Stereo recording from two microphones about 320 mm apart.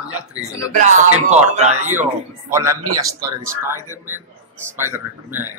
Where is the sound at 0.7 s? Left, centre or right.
Right.